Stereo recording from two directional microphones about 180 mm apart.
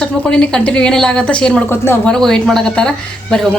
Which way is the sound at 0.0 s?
5° left (ahead or behind).